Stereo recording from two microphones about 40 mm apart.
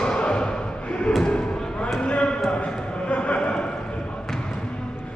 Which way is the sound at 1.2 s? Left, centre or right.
Left.